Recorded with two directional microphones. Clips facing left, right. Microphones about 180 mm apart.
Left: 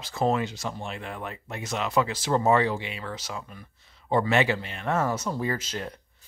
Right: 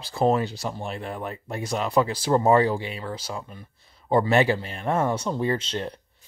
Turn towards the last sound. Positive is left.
turn(degrees=-30)  # may be behind; listen again after turning